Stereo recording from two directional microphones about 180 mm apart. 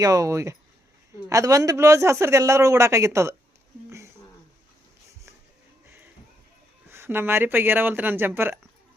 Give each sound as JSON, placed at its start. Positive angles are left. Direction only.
{"t": 0.0, "sound": "a man's voice", "side_deg": -20}
{"t": 3.8, "sound": "a sound", "side_deg": -15}
{"t": 6.9, "sound": "a man's voice", "side_deg": -15}